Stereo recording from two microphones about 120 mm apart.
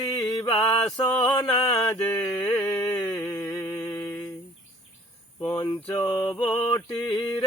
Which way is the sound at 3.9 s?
30° left (ahead or behind).